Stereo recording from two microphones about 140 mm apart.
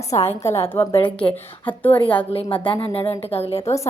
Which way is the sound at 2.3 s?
40° left (ahead or behind).